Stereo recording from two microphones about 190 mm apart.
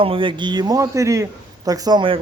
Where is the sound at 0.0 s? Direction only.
30° right (ahead or behind).